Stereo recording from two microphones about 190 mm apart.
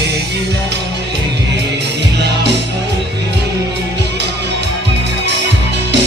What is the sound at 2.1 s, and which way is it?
Music, 65° right (ahead or behind).